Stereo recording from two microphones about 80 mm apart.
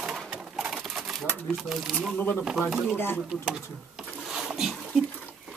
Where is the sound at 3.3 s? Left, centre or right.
Centre.